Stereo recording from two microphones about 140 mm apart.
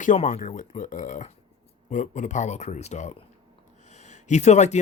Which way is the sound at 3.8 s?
55° left (ahead or behind).